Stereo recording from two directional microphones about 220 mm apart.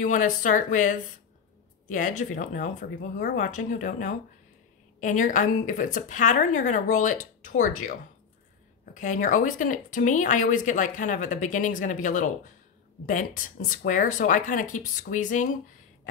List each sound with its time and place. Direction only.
0.0 s speech: 35° left (ahead or behind)